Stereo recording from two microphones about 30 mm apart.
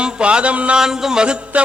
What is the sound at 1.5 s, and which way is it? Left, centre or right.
Speech, right.